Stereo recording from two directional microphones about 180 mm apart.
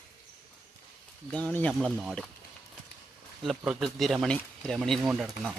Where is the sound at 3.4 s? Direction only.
Centre (ahead or behind).